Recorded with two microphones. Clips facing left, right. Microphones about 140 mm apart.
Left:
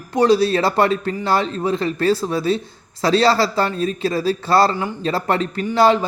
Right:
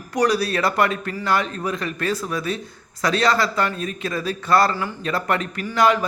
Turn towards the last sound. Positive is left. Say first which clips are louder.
# left 4 dB
turn(degrees=30)  # may be behind; listen again after turning